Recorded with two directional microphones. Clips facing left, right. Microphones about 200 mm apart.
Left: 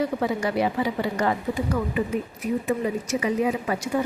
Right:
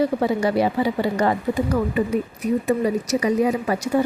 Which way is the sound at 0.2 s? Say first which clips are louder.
Right 4 dB; 35° right (ahead or behind).